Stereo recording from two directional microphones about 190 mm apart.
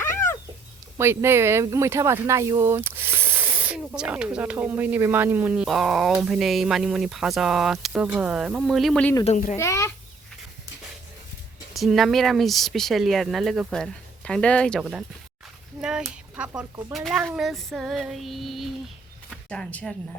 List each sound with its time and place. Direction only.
0.0 s cat: 15° left (ahead or behind)
0.9 s speech: 15° right (ahead or behind); by 9.1 s 5° left (ahead or behind)
9.2 s a child's voice: 40° left (ahead or behind)
9.6 s a child's voice: 15° left (ahead or behind)
11.7 s speech: centre (ahead or behind)